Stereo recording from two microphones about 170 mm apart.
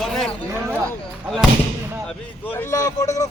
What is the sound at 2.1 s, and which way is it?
A man's voice, 10° left (ahead or behind).